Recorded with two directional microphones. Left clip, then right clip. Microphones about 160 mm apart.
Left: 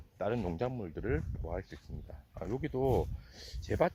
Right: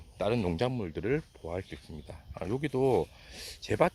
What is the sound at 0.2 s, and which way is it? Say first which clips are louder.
Speech: right 5 dB; 25° right (ahead or behind).